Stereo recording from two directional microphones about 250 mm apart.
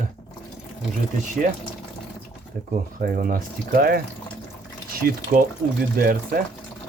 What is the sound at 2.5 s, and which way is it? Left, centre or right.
Speech, right.